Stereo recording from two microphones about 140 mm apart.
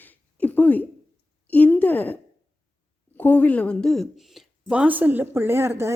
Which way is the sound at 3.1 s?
15° left (ahead or behind).